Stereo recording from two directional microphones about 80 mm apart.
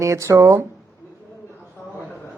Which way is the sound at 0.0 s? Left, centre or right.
Right.